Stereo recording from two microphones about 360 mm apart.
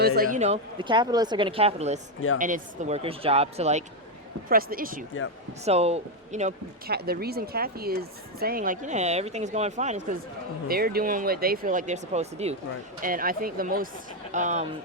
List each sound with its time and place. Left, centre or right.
0.2 s a woman's voice: right